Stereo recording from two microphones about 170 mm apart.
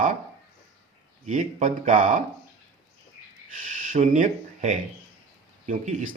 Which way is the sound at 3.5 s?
50° right (ahead or behind).